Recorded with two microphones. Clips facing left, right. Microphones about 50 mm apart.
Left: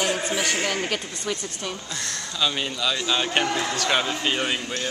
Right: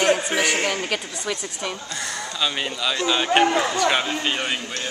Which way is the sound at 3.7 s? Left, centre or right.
Centre.